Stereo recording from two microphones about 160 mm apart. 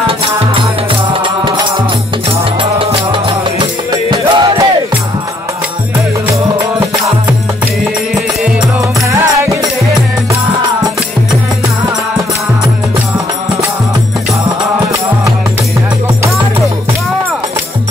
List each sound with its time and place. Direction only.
2.8 s music: 35° right (ahead or behind)